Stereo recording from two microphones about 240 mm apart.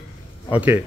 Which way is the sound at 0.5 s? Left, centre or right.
Centre.